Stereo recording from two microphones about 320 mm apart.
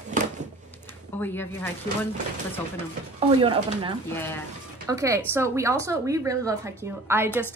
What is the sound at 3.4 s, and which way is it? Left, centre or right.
Speech, centre.